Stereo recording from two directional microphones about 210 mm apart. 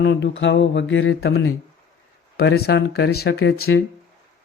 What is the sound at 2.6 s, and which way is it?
Speech, 50° left (ahead or behind).